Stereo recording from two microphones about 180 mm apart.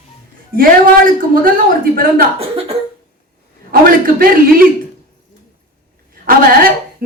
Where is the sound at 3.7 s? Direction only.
50° right (ahead or behind).